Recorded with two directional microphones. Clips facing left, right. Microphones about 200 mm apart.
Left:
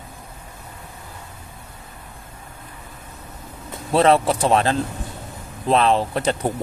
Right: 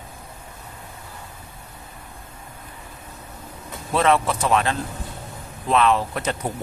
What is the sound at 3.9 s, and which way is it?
Speech, 30° left (ahead or behind).